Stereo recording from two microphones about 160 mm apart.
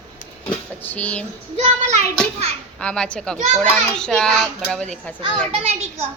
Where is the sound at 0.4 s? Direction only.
10° left (ahead or behind).